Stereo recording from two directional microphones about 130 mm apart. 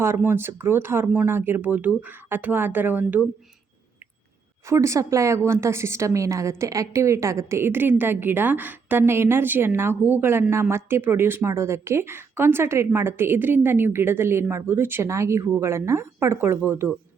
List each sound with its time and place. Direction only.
0.0 s speech: 20° right (ahead or behind)
4.6 s a woman's voice: 20° right (ahead or behind)